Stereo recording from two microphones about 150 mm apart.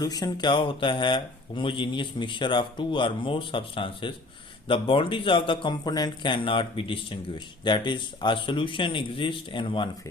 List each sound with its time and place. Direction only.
0.0 s a man's voice: 25° left (ahead or behind)